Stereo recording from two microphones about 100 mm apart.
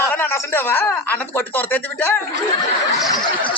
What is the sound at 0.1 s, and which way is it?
Speech, 20° left (ahead or behind).